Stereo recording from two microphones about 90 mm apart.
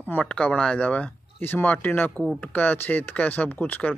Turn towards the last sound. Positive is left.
turn(degrees=20)  # may be behind; listen again after turning